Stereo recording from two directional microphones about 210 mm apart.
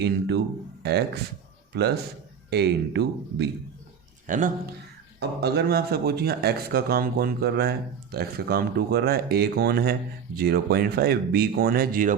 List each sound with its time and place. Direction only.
0.0 s speech: 55° right (ahead or behind)
4.3 s speech: 40° right (ahead or behind)
5.4 s speech: 50° right (ahead or behind)